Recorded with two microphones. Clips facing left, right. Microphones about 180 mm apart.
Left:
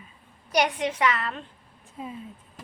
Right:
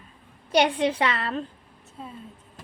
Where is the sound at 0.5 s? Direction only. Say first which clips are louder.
Right 3 dB; 30° right (ahead or behind).